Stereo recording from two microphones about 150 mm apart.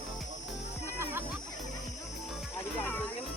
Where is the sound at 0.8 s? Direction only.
15° right (ahead or behind).